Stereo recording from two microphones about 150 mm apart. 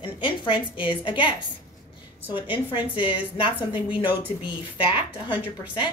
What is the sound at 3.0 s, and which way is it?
Speech, 35° left (ahead or behind).